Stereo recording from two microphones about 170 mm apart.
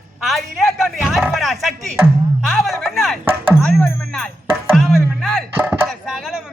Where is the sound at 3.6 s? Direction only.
10° left (ahead or behind).